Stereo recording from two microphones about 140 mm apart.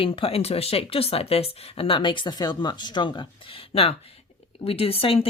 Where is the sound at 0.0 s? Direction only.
40° left (ahead or behind).